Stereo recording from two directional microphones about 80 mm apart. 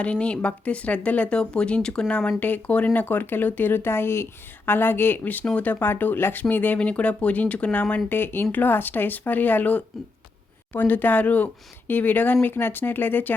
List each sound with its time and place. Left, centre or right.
0.0 s speech: centre